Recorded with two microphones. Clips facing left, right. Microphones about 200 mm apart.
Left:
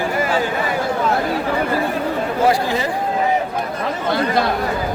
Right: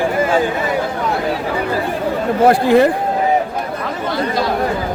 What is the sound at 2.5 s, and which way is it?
Speech, 55° right (ahead or behind).